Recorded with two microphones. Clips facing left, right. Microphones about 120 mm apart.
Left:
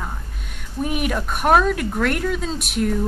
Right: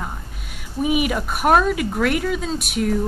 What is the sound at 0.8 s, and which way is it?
A woman's voice, 5° right (ahead or behind).